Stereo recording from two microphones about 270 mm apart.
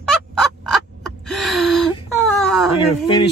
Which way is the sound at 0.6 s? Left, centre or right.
Centre.